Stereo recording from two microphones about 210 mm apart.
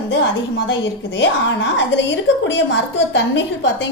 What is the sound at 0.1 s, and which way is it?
A woman's voice, 60° left (ahead or behind).